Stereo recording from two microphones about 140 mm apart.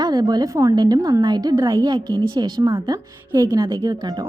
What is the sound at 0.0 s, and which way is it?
A woman's voice, 30° right (ahead or behind).